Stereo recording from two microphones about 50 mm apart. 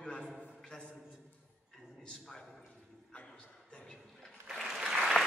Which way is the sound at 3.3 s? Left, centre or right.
Centre.